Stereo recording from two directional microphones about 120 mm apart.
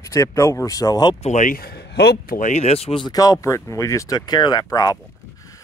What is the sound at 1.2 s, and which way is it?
Speech, 80° left.